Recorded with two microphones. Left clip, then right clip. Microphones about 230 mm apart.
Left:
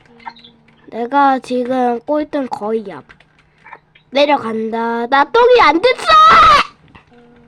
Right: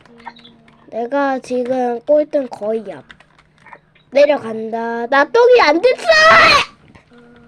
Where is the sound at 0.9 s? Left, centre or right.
Centre.